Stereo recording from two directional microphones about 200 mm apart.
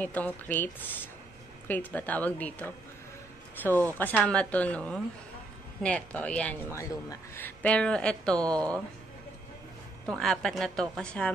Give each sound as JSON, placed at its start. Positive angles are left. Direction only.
{"t": 0.0, "sound": "speech", "side_deg": 10}
{"t": 10.1, "sound": "speech", "side_deg": 0}